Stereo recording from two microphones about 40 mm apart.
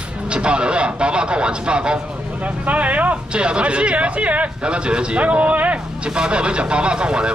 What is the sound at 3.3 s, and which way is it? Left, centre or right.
A man's voice, right.